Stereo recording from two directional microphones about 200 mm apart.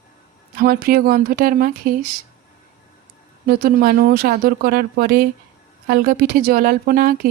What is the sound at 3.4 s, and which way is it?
A woman's voice, 50° right (ahead or behind).